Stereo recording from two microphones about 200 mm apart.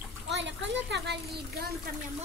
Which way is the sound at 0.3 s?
65° right (ahead or behind).